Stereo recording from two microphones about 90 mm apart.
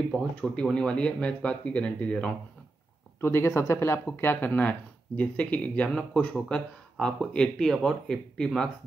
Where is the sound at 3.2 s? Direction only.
30° left (ahead or behind).